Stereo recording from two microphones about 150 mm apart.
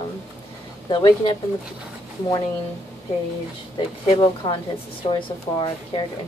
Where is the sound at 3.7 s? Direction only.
30° left (ahead or behind).